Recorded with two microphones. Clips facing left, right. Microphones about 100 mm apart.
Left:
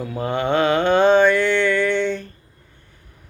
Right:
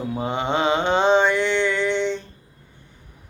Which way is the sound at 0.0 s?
20° right (ahead or behind).